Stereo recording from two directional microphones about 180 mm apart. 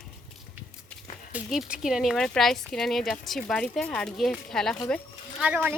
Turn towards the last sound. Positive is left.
turn(degrees=-10)  # may be behind; listen again after turning